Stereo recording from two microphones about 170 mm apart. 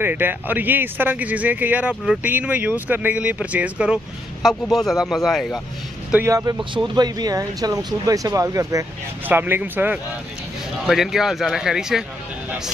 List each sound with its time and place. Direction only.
0.0 s speech: 10° right (ahead or behind)
6.1 s speech: 20° right (ahead or behind); by 12.0 s 5° right (ahead or behind)
12.4 s a sound: 5° right (ahead or behind)